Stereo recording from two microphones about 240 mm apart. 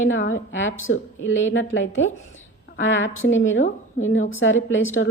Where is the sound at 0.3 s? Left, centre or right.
Left.